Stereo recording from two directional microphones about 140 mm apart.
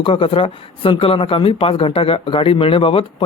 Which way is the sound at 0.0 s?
40° left (ahead or behind).